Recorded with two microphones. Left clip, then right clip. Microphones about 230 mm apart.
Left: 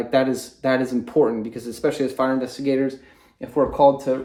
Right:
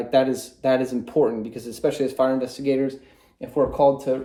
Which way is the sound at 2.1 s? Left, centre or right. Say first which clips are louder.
Right 1 dB; left.